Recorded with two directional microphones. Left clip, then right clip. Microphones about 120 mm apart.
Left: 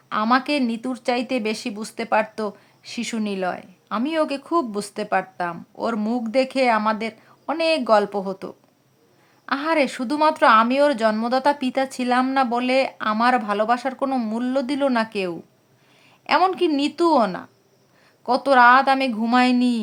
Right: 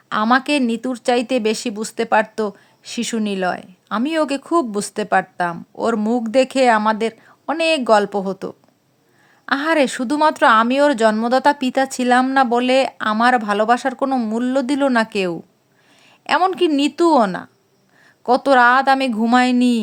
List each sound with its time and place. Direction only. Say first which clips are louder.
0.1 s speech: right 4 dB; 35° right (ahead or behind)